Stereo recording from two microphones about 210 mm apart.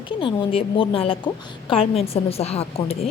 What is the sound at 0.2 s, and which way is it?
A woman's voice, 25° left (ahead or behind).